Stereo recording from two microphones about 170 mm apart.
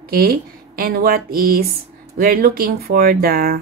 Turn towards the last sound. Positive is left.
turn(degrees=-60)  # may be behind; listen again after turning